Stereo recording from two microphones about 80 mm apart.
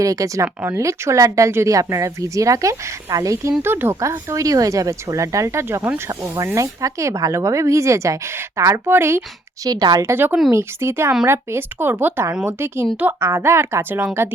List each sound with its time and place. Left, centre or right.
0.0 s speech: right
3.6 s speech: right
6.4 s speech: right
9.6 s a woman's voice: right
10.0 s speech: right